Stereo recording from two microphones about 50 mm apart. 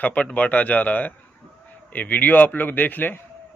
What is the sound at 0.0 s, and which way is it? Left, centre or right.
Speech, left.